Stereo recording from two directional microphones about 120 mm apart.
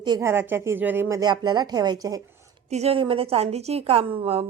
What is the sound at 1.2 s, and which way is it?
A woman's voice, 35° right (ahead or behind).